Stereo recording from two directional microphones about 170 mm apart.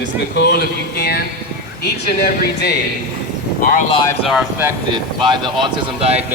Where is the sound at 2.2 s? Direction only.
65° left (ahead or behind).